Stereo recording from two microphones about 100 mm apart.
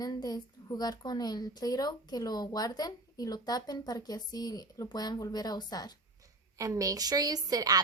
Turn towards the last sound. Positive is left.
turn(degrees=-40)  # may be behind; listen again after turning